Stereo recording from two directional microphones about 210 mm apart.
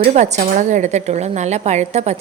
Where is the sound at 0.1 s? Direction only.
35° right (ahead or behind).